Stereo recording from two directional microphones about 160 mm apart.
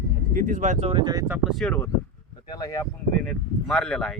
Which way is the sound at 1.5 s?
5° left (ahead or behind).